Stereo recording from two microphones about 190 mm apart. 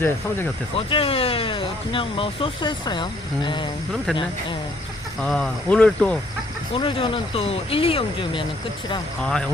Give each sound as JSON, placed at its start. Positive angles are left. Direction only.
{"t": 0.8, "sound": "speech", "side_deg": 30}
{"t": 5.2, "sound": "speech", "side_deg": 5}
{"t": 6.7, "sound": "speech", "side_deg": 25}
{"t": 9.2, "sound": "speech", "side_deg": 5}